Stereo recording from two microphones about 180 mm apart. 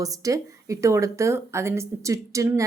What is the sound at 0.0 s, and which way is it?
Speech, 20° right (ahead or behind).